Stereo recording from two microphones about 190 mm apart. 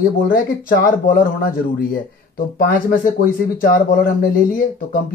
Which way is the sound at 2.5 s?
50° left (ahead or behind).